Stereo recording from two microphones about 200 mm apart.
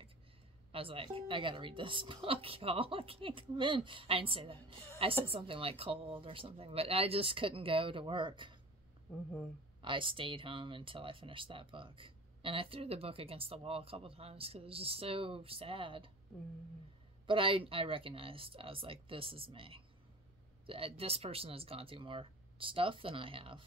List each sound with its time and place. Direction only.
0.7 s speech: 30° right (ahead or behind)
9.8 s speech: 25° right (ahead or behind)
17.3 s speech: 25° right (ahead or behind)